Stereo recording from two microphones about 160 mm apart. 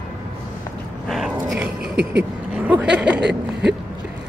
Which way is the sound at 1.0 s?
Centre (ahead or behind).